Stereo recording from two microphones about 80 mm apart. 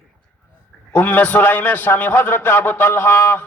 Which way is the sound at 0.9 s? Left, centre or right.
Left.